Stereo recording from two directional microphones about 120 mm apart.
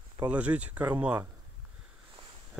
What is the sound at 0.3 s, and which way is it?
Speech, 10° right (ahead or behind).